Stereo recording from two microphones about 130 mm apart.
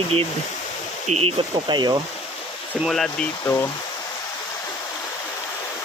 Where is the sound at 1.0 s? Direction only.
60° right (ahead or behind).